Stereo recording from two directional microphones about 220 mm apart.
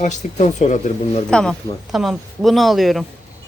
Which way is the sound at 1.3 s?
5° left (ahead or behind).